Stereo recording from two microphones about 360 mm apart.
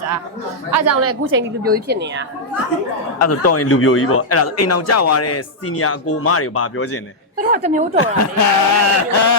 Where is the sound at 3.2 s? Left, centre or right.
Left.